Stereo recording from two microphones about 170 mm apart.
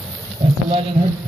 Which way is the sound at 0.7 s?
35° right (ahead or behind).